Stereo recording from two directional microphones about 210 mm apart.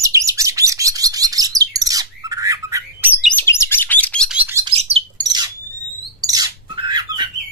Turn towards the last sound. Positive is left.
turn(degrees=-20)  # may be behind; listen again after turning